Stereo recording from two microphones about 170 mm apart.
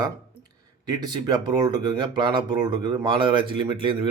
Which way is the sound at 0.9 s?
25° right (ahead or behind).